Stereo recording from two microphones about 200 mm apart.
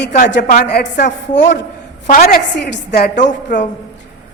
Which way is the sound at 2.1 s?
45° left (ahead or behind).